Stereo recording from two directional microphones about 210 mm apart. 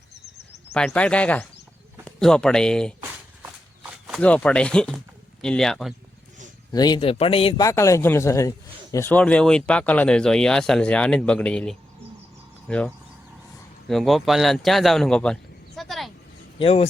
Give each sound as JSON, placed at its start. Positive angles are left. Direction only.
{"t": 0.7, "sound": "speech", "side_deg": 5}
{"t": 4.0, "sound": "speech", "side_deg": 0}
{"t": 6.7, "sound": "a man's voice", "side_deg": 20}
{"t": 16.6, "sound": "speech", "side_deg": 30}